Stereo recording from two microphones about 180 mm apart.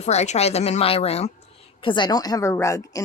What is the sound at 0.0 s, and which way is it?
A woman's voice, 40° left (ahead or behind).